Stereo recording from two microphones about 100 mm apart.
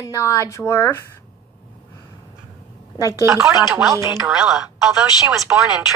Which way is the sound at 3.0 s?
35° left (ahead or behind).